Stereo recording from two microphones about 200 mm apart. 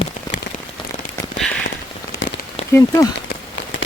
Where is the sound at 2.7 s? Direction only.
15° left (ahead or behind).